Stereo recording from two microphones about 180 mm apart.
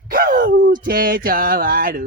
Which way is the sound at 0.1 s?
50° right (ahead or behind).